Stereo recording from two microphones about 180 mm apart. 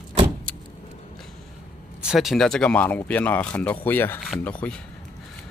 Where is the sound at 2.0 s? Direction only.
Centre (ahead or behind).